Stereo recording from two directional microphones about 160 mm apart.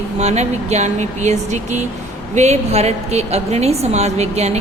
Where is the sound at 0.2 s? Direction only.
45° right (ahead or behind).